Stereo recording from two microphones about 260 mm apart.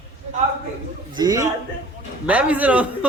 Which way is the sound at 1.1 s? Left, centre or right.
Centre.